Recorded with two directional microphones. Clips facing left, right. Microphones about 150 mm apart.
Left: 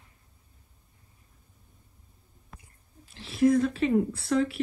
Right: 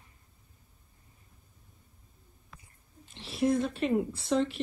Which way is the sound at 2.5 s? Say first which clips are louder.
Left 3 dB; 50° left (ahead or behind).